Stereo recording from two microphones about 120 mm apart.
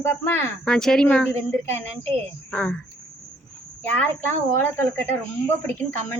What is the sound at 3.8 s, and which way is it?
A woman's voice, 15° left (ahead or behind).